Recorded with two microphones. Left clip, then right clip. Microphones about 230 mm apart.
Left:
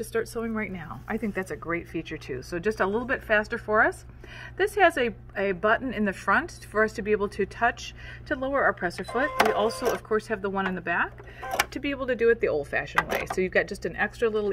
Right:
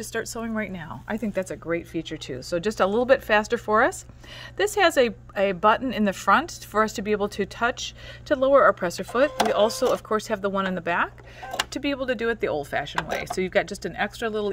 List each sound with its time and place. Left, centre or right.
0.0 s a woman's voice: right